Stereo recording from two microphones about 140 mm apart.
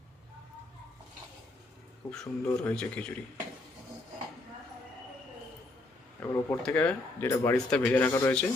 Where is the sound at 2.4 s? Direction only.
10° left (ahead or behind).